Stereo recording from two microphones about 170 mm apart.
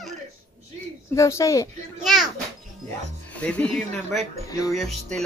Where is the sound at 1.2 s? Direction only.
15° left (ahead or behind).